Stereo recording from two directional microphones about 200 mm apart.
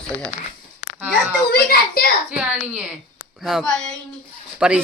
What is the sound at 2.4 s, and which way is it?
A child's voice, 5° right (ahead or behind).